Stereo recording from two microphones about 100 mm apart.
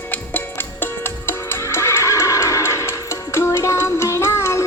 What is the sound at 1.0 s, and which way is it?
Neigh, 25° left (ahead or behind).